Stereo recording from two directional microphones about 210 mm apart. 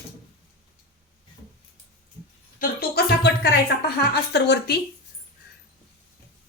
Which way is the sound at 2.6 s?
50° left (ahead or behind).